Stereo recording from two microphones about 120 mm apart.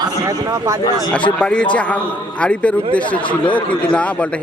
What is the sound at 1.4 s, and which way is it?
Speech, 10° left (ahead or behind).